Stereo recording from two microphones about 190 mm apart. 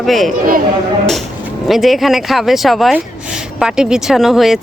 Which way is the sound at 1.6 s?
Centre (ahead or behind).